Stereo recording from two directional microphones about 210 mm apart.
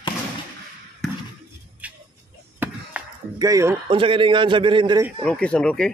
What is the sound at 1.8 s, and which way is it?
Music, 5° right (ahead or behind).